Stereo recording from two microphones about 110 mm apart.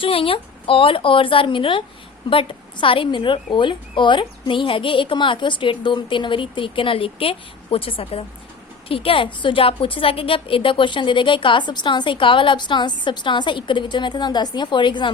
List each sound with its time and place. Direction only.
0.0 s a woman's voice: 55° left (ahead or behind)